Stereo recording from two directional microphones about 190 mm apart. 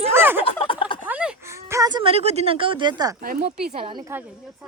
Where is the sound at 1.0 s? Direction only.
10° right (ahead or behind).